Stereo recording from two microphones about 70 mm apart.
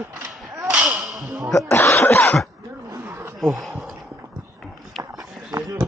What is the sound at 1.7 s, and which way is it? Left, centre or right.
Cough, left.